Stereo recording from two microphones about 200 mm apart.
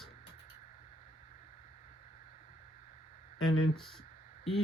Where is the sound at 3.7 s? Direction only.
Centre (ahead or behind).